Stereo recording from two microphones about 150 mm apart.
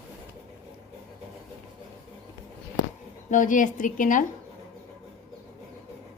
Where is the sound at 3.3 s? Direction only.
60° left (ahead or behind).